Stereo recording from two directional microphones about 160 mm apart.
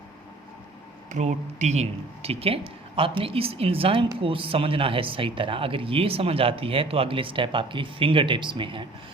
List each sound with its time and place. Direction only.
1.1 s speech: 50° right (ahead or behind); by 8.9 s 30° right (ahead or behind)